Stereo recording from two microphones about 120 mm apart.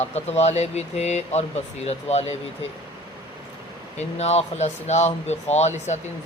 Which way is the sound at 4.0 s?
65° left (ahead or behind).